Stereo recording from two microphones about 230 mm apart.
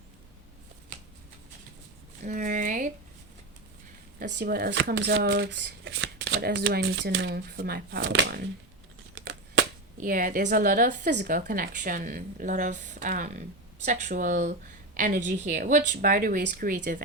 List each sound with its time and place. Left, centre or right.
2.2 s a sound: right
4.2 s speech: right
10.0 s a woman's voice: right